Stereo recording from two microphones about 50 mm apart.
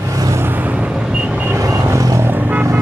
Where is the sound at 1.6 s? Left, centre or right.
Right.